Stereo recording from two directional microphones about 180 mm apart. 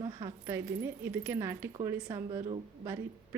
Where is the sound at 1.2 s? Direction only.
15° right (ahead or behind).